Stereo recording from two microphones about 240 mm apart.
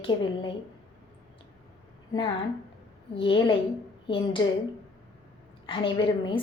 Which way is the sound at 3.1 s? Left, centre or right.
Left.